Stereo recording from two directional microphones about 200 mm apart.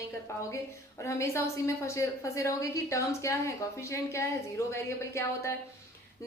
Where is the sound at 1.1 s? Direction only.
15° left (ahead or behind).